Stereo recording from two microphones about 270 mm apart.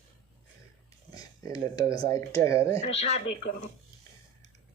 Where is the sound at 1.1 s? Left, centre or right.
Centre.